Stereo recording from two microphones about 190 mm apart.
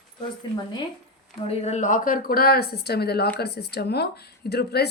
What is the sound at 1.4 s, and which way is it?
A woman's voice, 35° left (ahead or behind).